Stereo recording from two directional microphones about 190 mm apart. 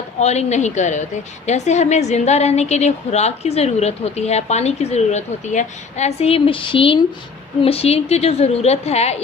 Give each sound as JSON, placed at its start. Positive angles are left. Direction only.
{"t": 0.2, "sound": "a woman's voice", "side_deg": 35}